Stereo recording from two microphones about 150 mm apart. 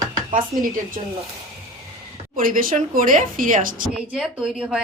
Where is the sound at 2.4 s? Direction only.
65° right (ahead or behind).